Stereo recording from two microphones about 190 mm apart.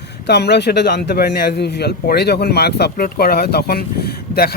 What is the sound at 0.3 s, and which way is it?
A man's voice, 60° left (ahead or behind).